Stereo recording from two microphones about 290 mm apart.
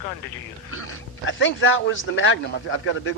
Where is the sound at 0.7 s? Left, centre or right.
Left.